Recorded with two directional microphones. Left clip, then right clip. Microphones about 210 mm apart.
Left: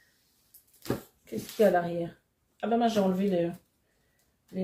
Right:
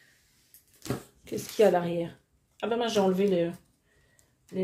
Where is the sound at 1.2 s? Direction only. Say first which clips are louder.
Right 2 dB; 45° right (ahead or behind).